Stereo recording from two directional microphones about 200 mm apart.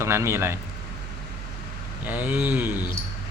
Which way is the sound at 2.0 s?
10° right (ahead or behind).